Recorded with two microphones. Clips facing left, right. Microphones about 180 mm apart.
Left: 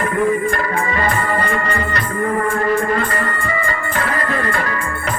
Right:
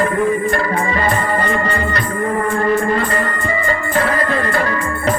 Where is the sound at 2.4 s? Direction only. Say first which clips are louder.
Right 1 dB; 30° right (ahead or behind).